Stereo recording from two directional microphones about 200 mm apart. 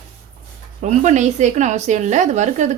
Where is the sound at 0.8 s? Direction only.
35° right (ahead or behind).